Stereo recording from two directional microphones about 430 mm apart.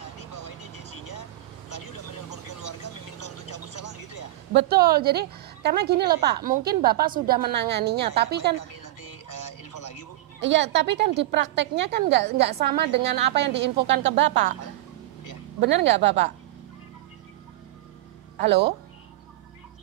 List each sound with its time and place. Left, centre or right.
1.8 s vehicle: left
2.6 s vehicle: left
4.6 s a woman's voice: right
8.8 s music: left
10.4 s a woman's voice: right
15.6 s a woman's voice: centre